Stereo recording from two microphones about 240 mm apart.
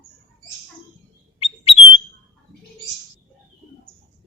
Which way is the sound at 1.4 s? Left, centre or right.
Left.